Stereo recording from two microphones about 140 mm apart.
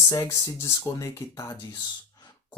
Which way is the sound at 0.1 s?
25° left (ahead or behind).